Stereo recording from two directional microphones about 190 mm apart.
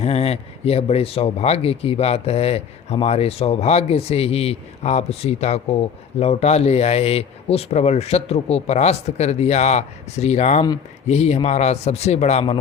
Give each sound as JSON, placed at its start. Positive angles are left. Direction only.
{"t": 0.0, "sound": "speech", "side_deg": 35}